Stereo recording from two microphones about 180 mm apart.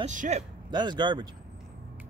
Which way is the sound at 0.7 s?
25° right (ahead or behind).